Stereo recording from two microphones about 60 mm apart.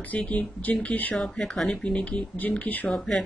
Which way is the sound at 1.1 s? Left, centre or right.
Centre.